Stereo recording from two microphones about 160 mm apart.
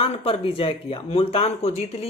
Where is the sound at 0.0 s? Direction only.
35° left (ahead or behind).